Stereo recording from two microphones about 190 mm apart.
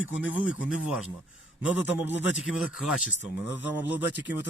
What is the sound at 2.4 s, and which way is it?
Speech, 5° right (ahead or behind).